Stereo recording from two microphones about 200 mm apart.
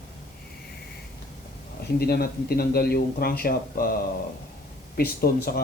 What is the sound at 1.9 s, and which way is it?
Speech, 50° left (ahead or behind).